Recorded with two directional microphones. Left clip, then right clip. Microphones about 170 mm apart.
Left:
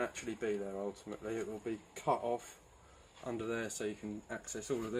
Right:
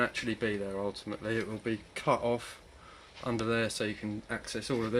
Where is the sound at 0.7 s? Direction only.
55° right (ahead or behind).